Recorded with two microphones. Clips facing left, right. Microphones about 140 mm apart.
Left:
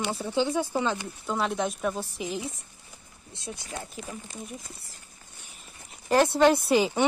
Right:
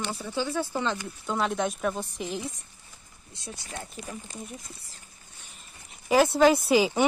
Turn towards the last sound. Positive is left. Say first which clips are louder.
# right 1 dB
turn(degrees=0)  # may be behind; listen again after turning